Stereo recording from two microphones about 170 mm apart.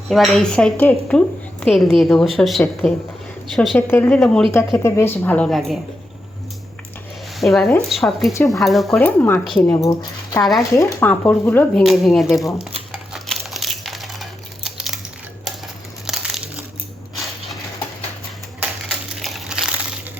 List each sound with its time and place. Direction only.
0.1 s a woman's voice: centre (ahead or behind)
3.8 s speech: 15° left (ahead or behind)
4.2 s a woman's voice: centre (ahead or behind)
4.8 s speech: 15° left (ahead or behind)
7.3 s a woman's voice: centre (ahead or behind)
8.3 s speech: 20° left (ahead or behind)
8.6 s a woman's voice: centre (ahead or behind)
9.0 s speech: 10° left (ahead or behind)
9.7 s speech: 20° left (ahead or behind)
11.8 s a woman's voice: centre (ahead or behind)
12.9 s typing: centre (ahead or behind)
16.0 s crumpling: 5° right (ahead or behind)
18.9 s crushing: centre (ahead or behind)